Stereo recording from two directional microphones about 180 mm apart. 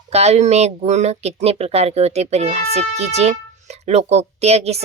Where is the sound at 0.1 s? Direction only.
35° right (ahead or behind).